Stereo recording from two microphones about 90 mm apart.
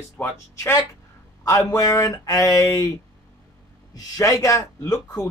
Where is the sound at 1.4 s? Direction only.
35° left (ahead or behind).